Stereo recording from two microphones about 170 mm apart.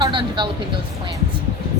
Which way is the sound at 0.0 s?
25° right (ahead or behind).